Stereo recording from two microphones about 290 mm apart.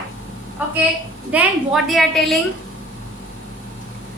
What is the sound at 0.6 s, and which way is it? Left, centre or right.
A woman's voice, centre.